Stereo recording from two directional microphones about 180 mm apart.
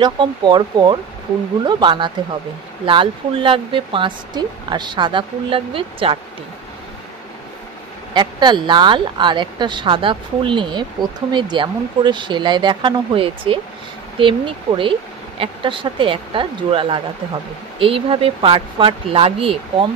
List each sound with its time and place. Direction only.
0.0 s speech: 25° right (ahead or behind)
8.1 s speech: 25° right (ahead or behind)